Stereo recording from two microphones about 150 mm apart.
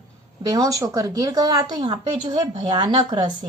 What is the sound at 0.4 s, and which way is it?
A woman's voice, 25° right (ahead or behind).